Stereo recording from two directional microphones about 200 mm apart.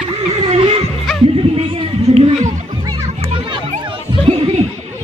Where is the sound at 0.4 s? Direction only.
30° right (ahead or behind).